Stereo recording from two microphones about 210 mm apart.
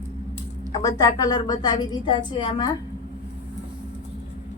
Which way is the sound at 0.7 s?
15° left (ahead or behind).